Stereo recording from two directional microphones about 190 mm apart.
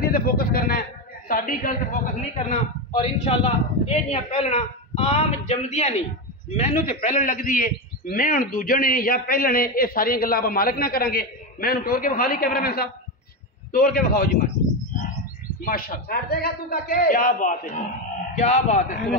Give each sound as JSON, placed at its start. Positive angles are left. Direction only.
{"t": 0.0, "sound": "a man's voice", "side_deg": 50}
{"t": 2.9, "sound": "a man's voice", "side_deg": 30}
{"t": 14.4, "sound": "bird", "side_deg": 40}
{"t": 15.6, "sound": "a man's voice", "side_deg": 50}